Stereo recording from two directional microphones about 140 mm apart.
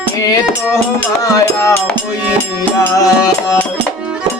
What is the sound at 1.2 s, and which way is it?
Music, 25° left (ahead or behind).